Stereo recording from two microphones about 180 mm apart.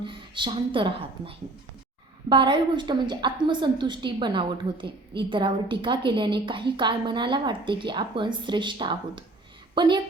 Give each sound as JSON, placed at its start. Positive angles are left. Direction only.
{"t": 0.0, "sound": "a woman's voice", "side_deg": -25}